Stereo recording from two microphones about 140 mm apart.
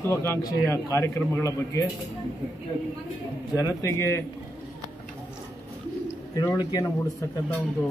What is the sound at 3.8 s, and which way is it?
Speech, 20° left (ahead or behind).